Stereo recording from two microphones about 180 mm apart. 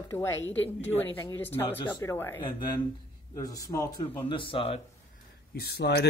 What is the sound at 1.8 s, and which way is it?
Speech, 25° left (ahead or behind).